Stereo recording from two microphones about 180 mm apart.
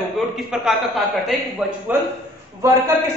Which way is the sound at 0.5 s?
Centre (ahead or behind).